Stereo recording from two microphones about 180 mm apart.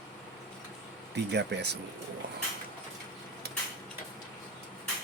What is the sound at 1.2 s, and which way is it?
Speech, 70° right (ahead or behind).